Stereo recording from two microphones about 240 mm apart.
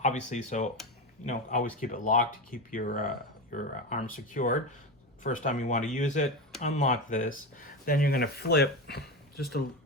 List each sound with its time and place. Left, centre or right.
0.0 s speech: left